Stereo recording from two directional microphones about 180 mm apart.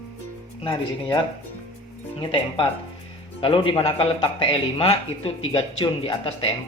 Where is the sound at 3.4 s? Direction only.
30° left (ahead or behind).